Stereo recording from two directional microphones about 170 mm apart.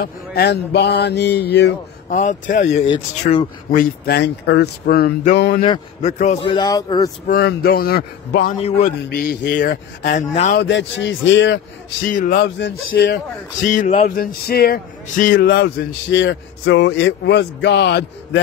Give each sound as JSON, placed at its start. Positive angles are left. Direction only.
{"t": 0.0, "sound": "speech", "side_deg": 65}
{"t": 2.0, "sound": "a man's voice", "side_deg": 50}
{"t": 3.7, "sound": "speech", "side_deg": 60}
{"t": 5.6, "sound": "a man's voice", "side_deg": 35}
{"t": 6.4, "sound": "speech", "side_deg": 25}
{"t": 7.2, "sound": "speech", "side_deg": 65}
{"t": 8.5, "sound": "a man's voice", "side_deg": 40}
{"t": 9.1, "sound": "speech", "side_deg": 65}
{"t": 9.6, "sound": "a man's voice", "side_deg": 50}
{"t": 10.5, "sound": "speech", "side_deg": 85}
{"t": 12.1, "sound": "a man's voice", "side_deg": 55}
{"t": 12.4, "sound": "speech", "side_deg": 90}
{"t": 13.6, "sound": "a man's voice", "side_deg": 50}
{"t": 15.3, "sound": "speech", "side_deg": 90}